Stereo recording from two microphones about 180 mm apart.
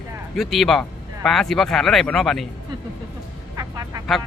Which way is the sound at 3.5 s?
20° right (ahead or behind).